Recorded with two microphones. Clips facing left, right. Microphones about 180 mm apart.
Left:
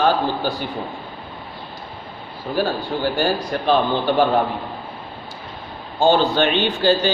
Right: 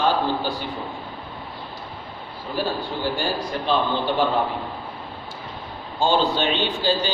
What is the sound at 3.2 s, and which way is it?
Speech, 55° left (ahead or behind).